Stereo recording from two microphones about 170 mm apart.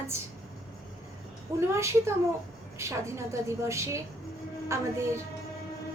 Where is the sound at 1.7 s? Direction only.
15° right (ahead or behind).